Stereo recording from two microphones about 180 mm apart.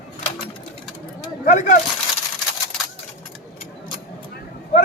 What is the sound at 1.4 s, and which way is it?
Coin, 45° left (ahead or behind).